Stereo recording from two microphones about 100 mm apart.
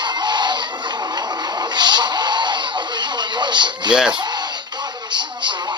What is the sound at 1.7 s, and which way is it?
Radio, 45° right (ahead or behind).